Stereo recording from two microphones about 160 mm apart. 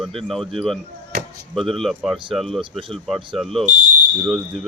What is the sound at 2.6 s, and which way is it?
Speech, 30° right (ahead or behind).